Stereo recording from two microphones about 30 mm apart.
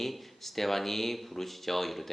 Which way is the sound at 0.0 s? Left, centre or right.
Centre.